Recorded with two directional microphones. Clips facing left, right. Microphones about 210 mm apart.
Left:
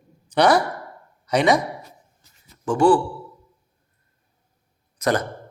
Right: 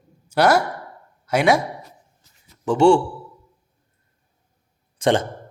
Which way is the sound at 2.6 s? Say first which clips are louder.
Right 2 dB; 25° right (ahead or behind).